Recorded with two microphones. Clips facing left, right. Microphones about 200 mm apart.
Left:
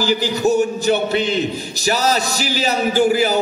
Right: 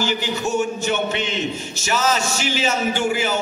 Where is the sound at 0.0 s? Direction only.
35° left (ahead or behind).